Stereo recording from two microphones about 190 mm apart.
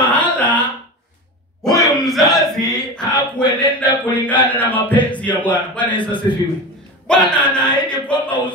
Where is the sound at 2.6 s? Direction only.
20° left (ahead or behind).